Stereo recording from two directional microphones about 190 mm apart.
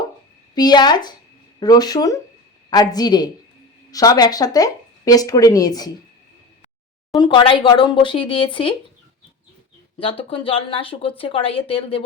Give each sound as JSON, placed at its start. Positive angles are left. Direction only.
{"t": 0.5, "sound": "speech", "side_deg": 20}
{"t": 7.2, "sound": "speech", "side_deg": 25}
{"t": 10.0, "sound": "speech", "side_deg": 30}